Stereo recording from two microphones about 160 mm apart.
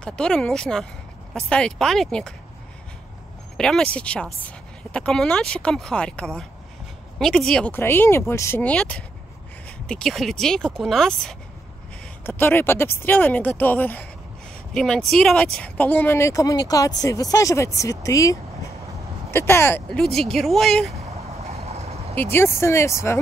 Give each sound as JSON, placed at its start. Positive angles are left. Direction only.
{"t": 0.0, "sound": "a woman's voice", "side_deg": 5}
{"t": 3.5, "sound": "a woman's voice", "side_deg": 5}
{"t": 20.2, "sound": "a woman's voice", "side_deg": 0}
{"t": 21.3, "sound": "vehicle", "side_deg": -40}
{"t": 22.1, "sound": "speech", "side_deg": 10}